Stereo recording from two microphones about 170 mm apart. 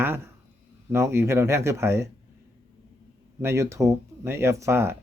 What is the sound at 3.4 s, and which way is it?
Speech, 15° right (ahead or behind).